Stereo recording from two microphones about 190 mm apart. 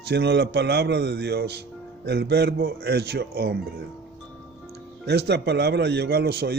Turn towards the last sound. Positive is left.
turn(degrees=-55)  # may be behind; listen again after turning